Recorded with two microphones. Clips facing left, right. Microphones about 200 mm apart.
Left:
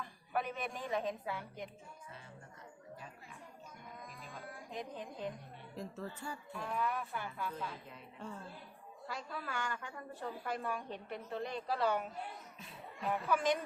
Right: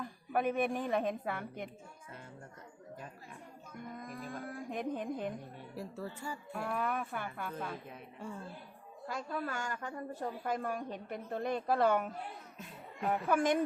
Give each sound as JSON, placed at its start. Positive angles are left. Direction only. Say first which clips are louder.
{"t": 0.3, "sound": "a woman's voice", "louder": "right 7 dB", "side_deg": -55}
{"t": 3.9, "sound": "music", "louder": "right 8 dB", "side_deg": -50}
{"t": 5.7, "sound": "speech", "louder": "right 1 dB", "side_deg": -10}
{"t": 6.7, "sound": "a woman's voice", "louder": "right 2 dB", "side_deg": -55}
{"t": 9.0, "sound": "a woman's voice", "louder": "right 6 dB", "side_deg": -45}
{"t": 12.5, "sound": "a sound", "louder": "right 4 dB", "side_deg": -50}